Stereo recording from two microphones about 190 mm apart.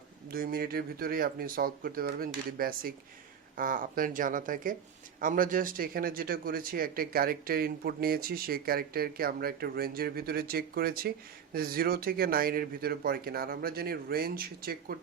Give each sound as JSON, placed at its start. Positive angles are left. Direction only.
{"t": 0.3, "sound": "speech", "side_deg": -50}